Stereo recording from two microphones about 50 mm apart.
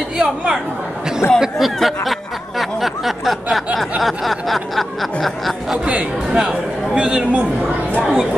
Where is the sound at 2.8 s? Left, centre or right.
Centre.